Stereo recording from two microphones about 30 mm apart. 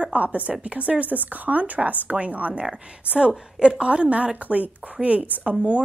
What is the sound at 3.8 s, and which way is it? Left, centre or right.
Speech, right.